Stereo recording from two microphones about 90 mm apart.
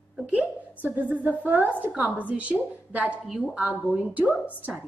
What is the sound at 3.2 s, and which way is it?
Speech, 5° right (ahead or behind).